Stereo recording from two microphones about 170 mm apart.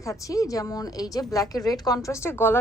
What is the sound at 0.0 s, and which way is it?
A woman's voice, 20° left (ahead or behind).